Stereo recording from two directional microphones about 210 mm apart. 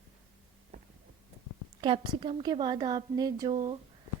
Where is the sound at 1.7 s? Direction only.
20° right (ahead or behind).